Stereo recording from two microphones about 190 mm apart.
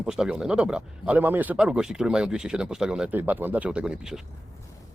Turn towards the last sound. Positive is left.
turn(degrees=-5)  # may be behind; listen again after turning